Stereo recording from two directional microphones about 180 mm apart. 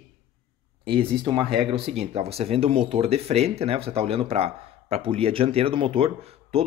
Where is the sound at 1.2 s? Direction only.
25° right (ahead or behind).